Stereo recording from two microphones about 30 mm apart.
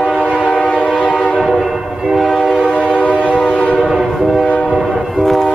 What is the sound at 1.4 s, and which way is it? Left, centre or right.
Train, centre.